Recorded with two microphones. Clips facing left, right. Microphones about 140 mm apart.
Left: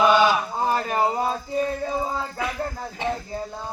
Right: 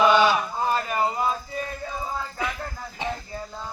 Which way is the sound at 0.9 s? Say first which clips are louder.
Left 2 dB; 25° left (ahead or behind).